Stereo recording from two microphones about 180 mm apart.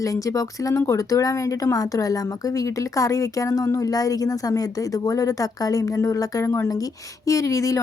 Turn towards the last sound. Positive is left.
turn(degrees=15)  # may be behind; listen again after turning